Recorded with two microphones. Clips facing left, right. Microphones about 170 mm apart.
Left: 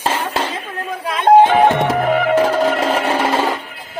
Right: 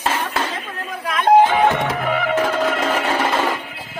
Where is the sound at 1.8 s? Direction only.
45° left (ahead or behind).